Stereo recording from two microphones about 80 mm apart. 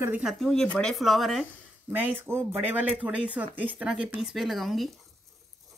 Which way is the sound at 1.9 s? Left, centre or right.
Right.